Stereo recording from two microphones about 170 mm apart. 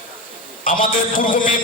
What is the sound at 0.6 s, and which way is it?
Speech, 50° left (ahead or behind).